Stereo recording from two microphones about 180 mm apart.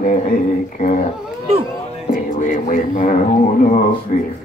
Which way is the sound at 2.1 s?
45° left (ahead or behind).